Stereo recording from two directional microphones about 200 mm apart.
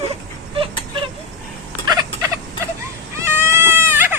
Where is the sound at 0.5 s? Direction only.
25° right (ahead or behind).